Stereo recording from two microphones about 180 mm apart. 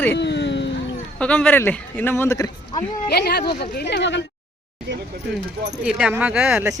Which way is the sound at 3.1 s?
60° left (ahead or behind).